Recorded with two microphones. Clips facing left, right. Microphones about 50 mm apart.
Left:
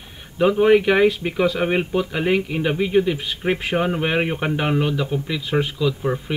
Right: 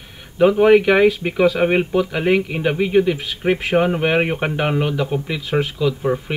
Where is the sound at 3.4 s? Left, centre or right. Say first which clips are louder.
Right 3 dB; right.